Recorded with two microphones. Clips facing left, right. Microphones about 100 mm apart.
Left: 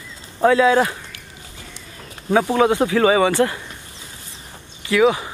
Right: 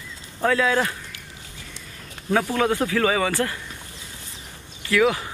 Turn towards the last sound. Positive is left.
turn(degrees=10)  # may be behind; listen again after turning